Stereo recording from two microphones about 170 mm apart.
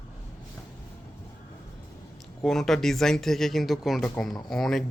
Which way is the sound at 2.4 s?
Centre (ahead or behind).